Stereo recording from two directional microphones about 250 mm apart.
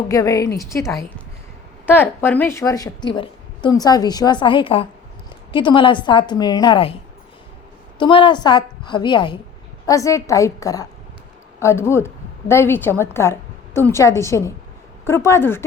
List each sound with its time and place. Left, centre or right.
0.1 s a woman's voice: centre
7.9 s a woman's voice: centre